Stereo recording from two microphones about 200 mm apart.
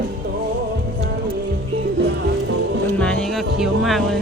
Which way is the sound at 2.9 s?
5° left (ahead or behind).